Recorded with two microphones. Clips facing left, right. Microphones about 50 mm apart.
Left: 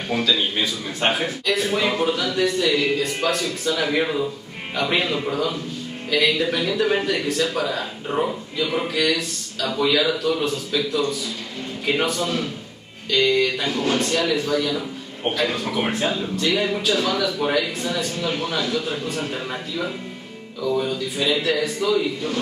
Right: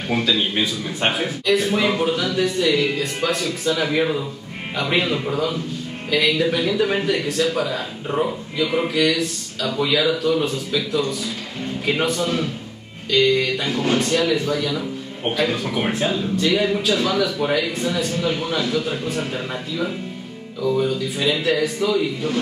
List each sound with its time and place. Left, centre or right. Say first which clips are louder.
0.1 s a man's voice: right 1 dB; centre
12.2 s a man's voice: right 2 dB; centre
20.7 s a man's voice: right 1 dB; centre